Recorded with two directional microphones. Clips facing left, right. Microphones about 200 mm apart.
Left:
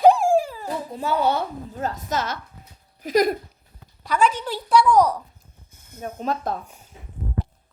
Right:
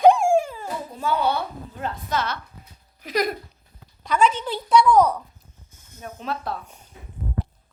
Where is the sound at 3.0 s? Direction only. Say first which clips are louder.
Left 5 dB; 45° left (ahead or behind).